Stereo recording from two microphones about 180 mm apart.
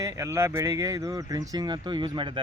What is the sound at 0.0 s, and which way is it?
Speech, 15° right (ahead or behind).